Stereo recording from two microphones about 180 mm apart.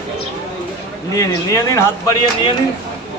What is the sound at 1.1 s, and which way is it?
Speech, 20° left (ahead or behind).